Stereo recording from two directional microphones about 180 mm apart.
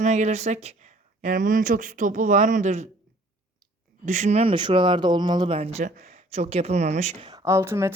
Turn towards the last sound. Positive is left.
turn(degrees=-15)  # may be behind; listen again after turning